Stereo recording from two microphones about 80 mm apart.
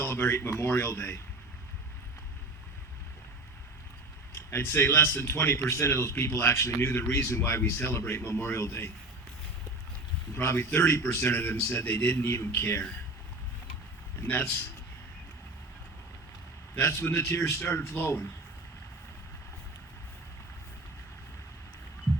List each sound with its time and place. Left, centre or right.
0.0 s speech: left
4.5 s speech: left
10.3 s speech: left
14.2 s speech: left
16.7 s speech: left